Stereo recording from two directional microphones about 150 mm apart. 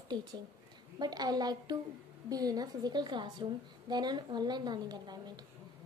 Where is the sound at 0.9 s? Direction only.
25° right (ahead or behind).